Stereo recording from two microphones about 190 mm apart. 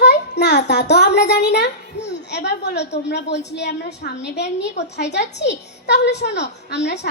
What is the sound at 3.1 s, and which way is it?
A child's voice, 65° left (ahead or behind).